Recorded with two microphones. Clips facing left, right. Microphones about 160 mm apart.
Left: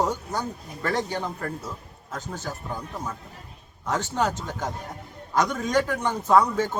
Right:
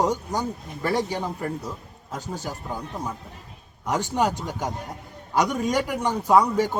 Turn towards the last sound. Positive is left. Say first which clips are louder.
# right 1 dB
turn(degrees=-15)  # may be behind; listen again after turning